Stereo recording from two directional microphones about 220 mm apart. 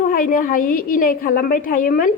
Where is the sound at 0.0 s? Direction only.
40° left (ahead or behind).